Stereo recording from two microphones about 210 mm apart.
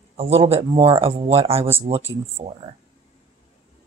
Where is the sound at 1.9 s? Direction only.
40° right (ahead or behind).